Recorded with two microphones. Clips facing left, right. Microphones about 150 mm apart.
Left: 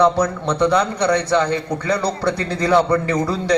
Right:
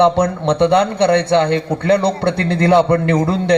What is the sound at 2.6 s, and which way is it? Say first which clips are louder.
Speech: right 3 dB; 25° right (ahead or behind).